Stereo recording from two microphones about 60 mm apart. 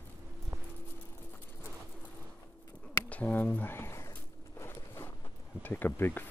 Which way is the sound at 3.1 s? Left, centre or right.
Left.